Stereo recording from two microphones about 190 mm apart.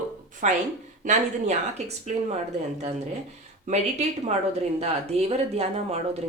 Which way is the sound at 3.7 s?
35° right (ahead or behind).